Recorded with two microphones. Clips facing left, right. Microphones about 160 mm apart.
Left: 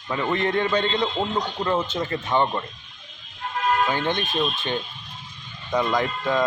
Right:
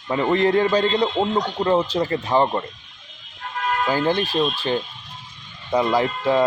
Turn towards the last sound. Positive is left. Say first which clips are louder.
# right 4 dB
turn(degrees=-30)  # may be behind; listen again after turning